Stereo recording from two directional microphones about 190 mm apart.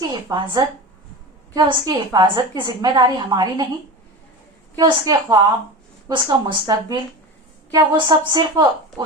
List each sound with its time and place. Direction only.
0.1 s a woman's voice: 25° right (ahead or behind)
4.8 s a woman's voice: 20° right (ahead or behind)